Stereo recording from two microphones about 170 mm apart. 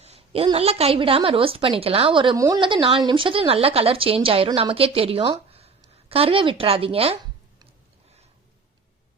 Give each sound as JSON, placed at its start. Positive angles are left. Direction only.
{"t": 0.0, "sound": "a woman's voice", "side_deg": -35}